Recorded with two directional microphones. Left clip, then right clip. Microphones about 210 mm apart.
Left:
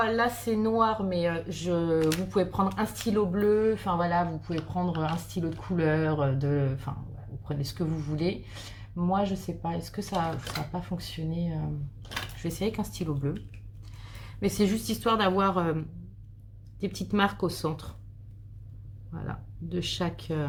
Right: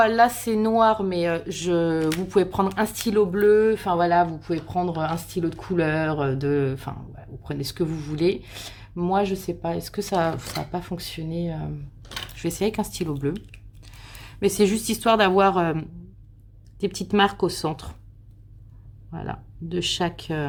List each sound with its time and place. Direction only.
0.0 s a woman's voice: 45° right (ahead or behind)
19.1 s speech: 40° right (ahead or behind)